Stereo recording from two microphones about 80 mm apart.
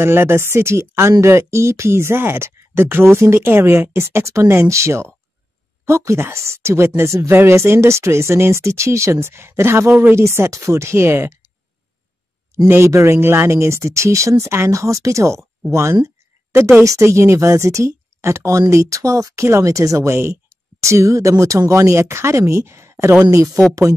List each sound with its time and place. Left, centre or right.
0.0 s speech: right
12.6 s speech: right